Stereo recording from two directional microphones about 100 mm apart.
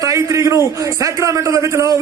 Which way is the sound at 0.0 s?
30° right (ahead or behind).